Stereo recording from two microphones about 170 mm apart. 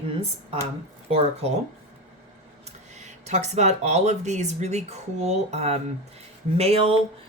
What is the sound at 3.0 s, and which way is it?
Speech, 45° right (ahead or behind).